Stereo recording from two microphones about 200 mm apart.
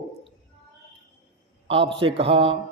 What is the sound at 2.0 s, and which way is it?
Mantra, 30° right (ahead or behind).